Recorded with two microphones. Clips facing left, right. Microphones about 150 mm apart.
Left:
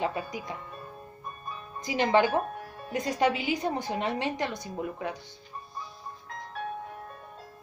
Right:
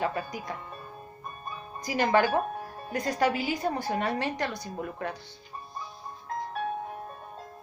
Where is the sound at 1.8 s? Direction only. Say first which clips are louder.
Even; 20° left (ahead or behind).